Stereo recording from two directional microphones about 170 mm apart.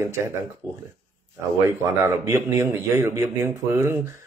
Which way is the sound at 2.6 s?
15° right (ahead or behind).